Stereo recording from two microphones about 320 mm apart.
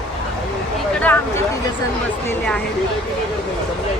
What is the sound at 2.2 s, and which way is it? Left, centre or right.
Speech, centre.